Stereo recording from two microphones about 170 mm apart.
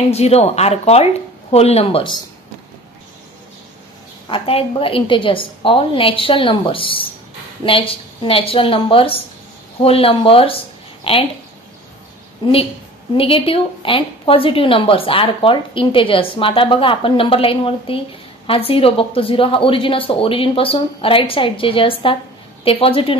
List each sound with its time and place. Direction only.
0.1 s a woman's voice: 40° left (ahead or behind)
4.3 s a woman's voice: 35° left (ahead or behind)
12.4 s a woman's voice: 30° left (ahead or behind)